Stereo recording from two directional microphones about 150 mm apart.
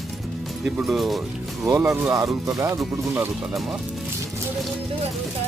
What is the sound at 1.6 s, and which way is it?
Speech, 20° right (ahead or behind).